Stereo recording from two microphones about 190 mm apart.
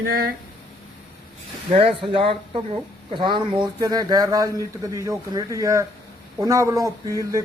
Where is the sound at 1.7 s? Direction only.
30° right (ahead or behind).